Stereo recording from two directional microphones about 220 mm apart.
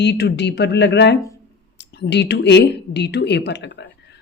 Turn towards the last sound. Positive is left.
turn(degrees=50)  # may be behind; listen again after turning